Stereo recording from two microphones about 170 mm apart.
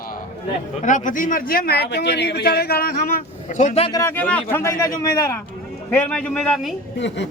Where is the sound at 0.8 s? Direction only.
50° left (ahead or behind).